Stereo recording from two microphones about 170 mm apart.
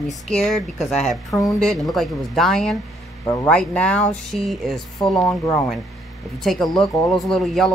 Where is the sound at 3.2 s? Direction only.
15° left (ahead or behind).